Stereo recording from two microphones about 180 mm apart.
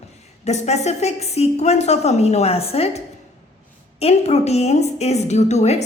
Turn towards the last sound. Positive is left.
turn(degrees=40)  # may be behind; listen again after turning